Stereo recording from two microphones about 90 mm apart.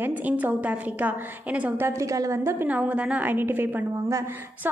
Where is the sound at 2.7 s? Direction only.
15° right (ahead or behind).